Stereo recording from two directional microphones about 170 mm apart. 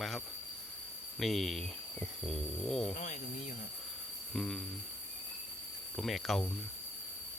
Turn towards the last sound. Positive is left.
turn(degrees=0)  # may be behind; listen again after turning